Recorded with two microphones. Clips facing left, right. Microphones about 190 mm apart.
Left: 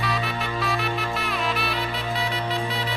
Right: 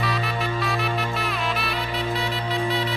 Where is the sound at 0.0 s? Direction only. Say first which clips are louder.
Right 1 dB; centre (ahead or behind).